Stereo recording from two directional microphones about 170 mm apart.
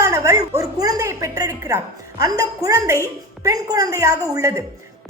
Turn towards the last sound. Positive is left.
turn(degrees=-20)  # may be behind; listen again after turning